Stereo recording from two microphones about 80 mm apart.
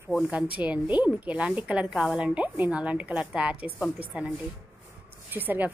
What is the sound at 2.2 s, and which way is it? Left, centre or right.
A woman's voice, centre.